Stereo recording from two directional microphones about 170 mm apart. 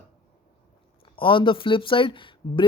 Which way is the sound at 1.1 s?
30° left (ahead or behind).